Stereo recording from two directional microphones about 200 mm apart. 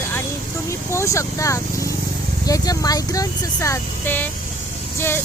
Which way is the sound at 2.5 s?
20° left (ahead or behind).